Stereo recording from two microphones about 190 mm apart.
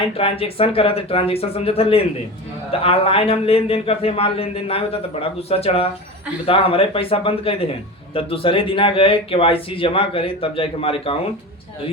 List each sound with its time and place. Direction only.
0.2 s a man's voice: 30° left (ahead or behind)